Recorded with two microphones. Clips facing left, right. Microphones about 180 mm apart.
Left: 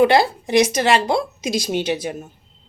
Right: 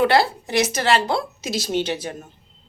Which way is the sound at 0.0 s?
15° left (ahead or behind).